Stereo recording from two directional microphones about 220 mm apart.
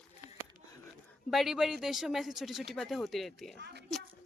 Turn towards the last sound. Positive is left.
turn(degrees=0)  # may be behind; listen again after turning